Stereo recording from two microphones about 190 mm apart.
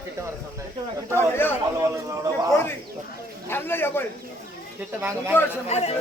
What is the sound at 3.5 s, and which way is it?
Speech, 10° left (ahead or behind).